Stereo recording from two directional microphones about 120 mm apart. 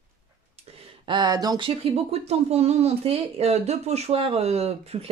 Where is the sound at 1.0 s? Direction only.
40° right (ahead or behind).